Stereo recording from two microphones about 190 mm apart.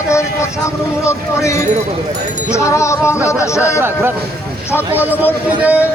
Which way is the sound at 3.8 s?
10° right (ahead or behind).